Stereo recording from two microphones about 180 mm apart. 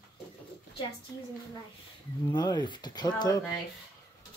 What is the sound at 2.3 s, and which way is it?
Speech, 25° left (ahead or behind).